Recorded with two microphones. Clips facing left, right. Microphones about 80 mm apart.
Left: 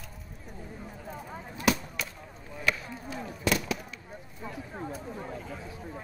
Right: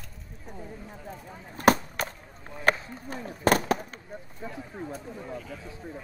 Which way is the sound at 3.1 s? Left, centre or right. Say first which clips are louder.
Right 6 dB; right.